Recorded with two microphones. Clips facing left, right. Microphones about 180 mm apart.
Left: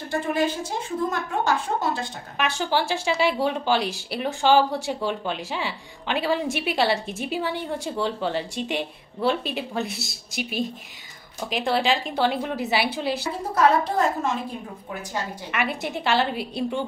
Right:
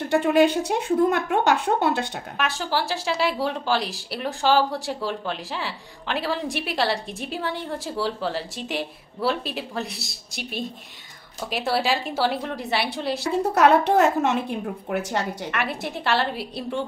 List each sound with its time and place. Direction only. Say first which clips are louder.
0.1 s speech: right 6 dB; 70° right (ahead or behind)
2.3 s a woman's voice: left 2 dB; centre (ahead or behind)
13.3 s speech: right 4 dB; 70° right (ahead or behind)
15.5 s a woman's voice: left 5 dB; centre (ahead or behind)